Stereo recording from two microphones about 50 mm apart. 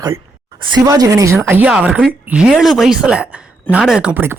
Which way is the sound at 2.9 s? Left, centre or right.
Right.